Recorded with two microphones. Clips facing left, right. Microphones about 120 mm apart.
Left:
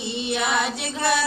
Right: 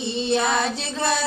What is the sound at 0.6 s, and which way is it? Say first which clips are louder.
Music: right 1 dB; 15° left (ahead or behind).